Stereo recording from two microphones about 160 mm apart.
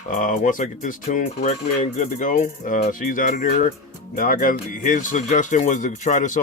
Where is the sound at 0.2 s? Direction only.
55° left (ahead or behind).